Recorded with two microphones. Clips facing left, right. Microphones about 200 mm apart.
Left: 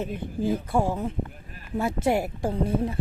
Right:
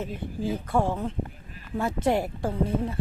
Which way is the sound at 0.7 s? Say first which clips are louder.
Left 1 dB; 10° left (ahead or behind).